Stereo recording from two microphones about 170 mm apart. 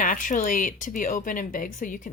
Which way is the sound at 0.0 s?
50° left (ahead or behind).